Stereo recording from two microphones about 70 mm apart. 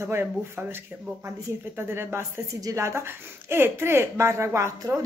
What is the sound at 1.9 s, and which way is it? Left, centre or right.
A woman's voice, right.